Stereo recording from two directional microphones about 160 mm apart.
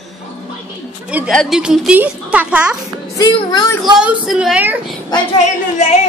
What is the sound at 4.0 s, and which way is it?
Speech, 5° right (ahead or behind).